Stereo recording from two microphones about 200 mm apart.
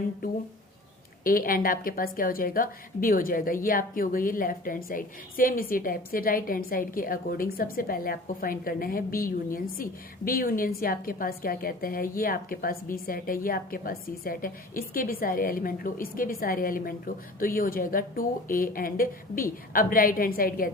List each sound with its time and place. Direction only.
0.2 s a woman's voice: 45° left (ahead or behind)